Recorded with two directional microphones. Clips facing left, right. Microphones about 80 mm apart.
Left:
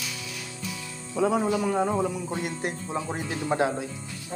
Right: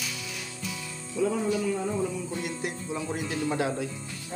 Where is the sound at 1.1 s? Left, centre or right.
Left.